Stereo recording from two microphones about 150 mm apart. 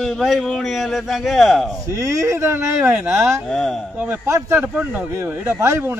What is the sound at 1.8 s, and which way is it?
Speech, 20° right (ahead or behind).